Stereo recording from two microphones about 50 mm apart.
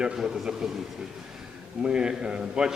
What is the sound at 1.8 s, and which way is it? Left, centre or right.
Speech, centre.